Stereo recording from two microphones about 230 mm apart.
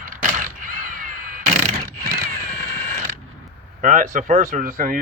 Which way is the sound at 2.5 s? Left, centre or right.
Right.